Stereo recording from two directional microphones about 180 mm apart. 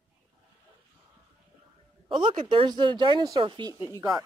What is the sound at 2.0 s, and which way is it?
Speech, 30° right (ahead or behind).